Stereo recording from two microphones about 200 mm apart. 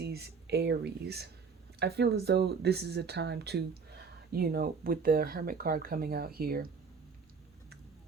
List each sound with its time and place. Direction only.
0.0 s speech: 55° right (ahead or behind)